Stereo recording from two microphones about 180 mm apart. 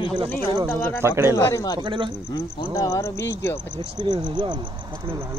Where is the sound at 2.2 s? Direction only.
25° left (ahead or behind).